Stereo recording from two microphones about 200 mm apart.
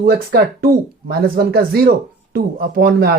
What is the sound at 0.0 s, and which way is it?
Speech, 50° right (ahead or behind).